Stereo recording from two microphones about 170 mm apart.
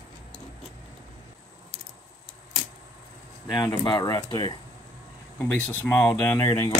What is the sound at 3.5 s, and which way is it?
Speech, 25° left (ahead or behind).